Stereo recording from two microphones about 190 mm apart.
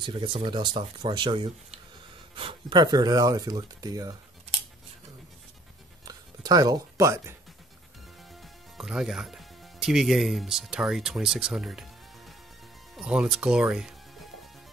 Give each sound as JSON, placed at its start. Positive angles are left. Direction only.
{"t": 0.0, "sound": "speech", "side_deg": -25}
{"t": 6.0, "sound": "writing", "side_deg": -20}
{"t": 8.2, "sound": "speech", "side_deg": 0}